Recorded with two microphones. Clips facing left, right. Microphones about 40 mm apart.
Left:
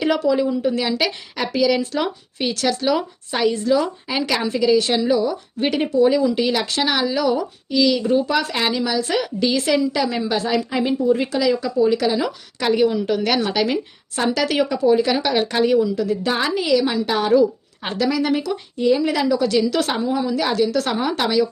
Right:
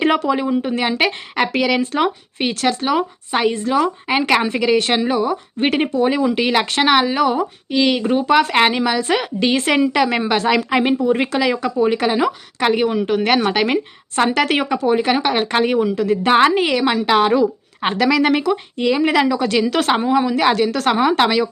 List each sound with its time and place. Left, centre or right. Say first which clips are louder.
0.0 s a woman's voice: right 1 dB; right